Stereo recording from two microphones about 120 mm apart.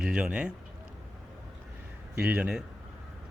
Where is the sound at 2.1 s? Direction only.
10° right (ahead or behind).